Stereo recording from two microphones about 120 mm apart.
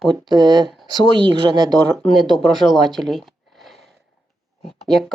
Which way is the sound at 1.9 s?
Centre (ahead or behind).